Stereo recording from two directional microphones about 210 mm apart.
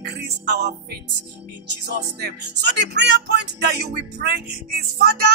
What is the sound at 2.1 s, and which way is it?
Speech, 50° right (ahead or behind).